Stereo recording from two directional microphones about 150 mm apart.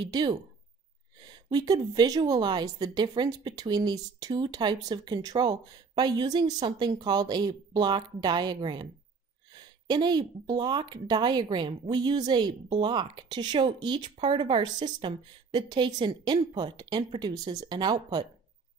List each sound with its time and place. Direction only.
0.0 s a woman's voice: 30° right (ahead or behind)